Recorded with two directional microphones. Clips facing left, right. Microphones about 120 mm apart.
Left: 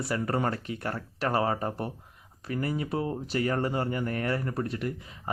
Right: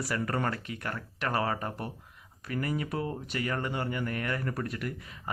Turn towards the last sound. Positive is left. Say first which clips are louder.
# left 3 dB
turn(degrees=30)  # may be behind; listen again after turning